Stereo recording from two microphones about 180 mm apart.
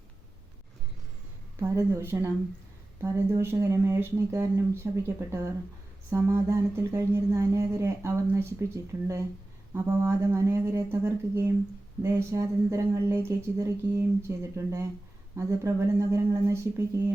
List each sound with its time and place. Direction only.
1.6 s speech: 15° right (ahead or behind)